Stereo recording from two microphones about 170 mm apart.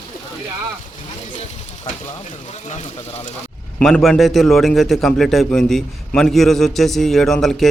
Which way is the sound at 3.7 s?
5° left (ahead or behind).